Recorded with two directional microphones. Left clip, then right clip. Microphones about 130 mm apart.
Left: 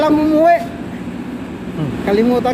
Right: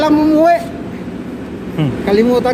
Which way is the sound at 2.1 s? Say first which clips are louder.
Right 2 dB; 25° right (ahead or behind).